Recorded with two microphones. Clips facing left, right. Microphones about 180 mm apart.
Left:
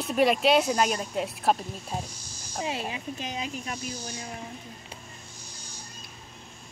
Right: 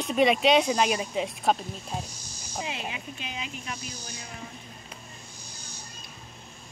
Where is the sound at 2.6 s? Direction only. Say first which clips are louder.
Left 3 dB; 35° left (ahead or behind).